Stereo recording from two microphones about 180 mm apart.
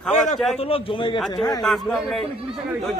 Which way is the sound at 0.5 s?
30° left (ahead or behind).